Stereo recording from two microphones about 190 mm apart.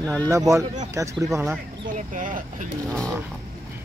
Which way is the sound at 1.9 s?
45° right (ahead or behind).